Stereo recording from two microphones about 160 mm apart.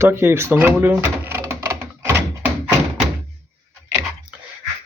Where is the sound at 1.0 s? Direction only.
15° right (ahead or behind).